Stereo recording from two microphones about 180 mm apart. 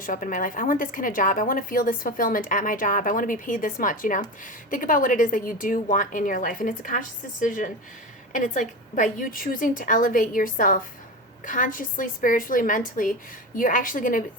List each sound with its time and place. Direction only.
0.0 s a woman's voice: 50° left (ahead or behind)